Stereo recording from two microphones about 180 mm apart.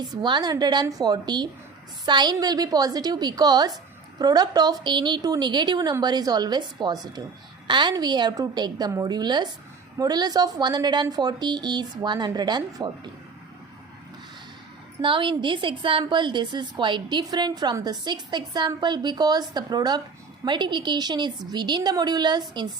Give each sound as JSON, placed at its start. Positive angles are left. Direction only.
{"t": 0.2, "sound": "a woman's voice", "side_deg": -25}
{"t": 15.0, "sound": "a woman's voice", "side_deg": -30}